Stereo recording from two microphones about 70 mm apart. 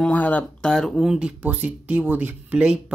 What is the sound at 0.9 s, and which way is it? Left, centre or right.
Speech, centre.